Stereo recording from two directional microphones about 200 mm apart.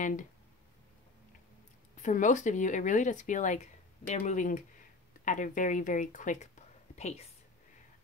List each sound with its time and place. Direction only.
0.0 s speech: 40° left (ahead or behind)
2.0 s speech: 40° left (ahead or behind)